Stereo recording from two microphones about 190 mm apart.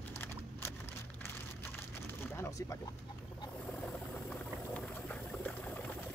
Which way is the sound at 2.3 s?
15° left (ahead or behind).